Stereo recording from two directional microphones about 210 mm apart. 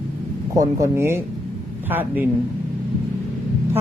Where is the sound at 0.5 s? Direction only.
15° right (ahead or behind).